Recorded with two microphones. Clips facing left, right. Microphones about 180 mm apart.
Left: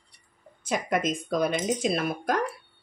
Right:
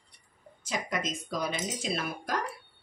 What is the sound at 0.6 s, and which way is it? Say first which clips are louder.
Speech: left 7 dB; 55° left (ahead or behind).